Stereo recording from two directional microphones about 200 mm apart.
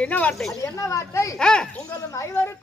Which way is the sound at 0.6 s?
15° left (ahead or behind).